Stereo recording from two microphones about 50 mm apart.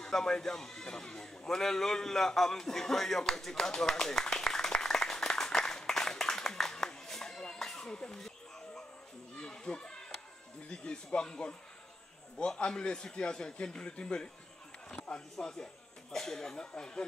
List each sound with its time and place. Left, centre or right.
0.0 s bleat: centre
9.4 s a sound: centre
10.7 s a man's voice: centre
15.3 s speech: centre